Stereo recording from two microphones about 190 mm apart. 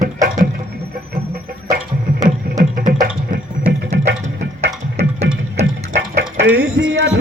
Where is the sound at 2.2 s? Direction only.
45° right (ahead or behind).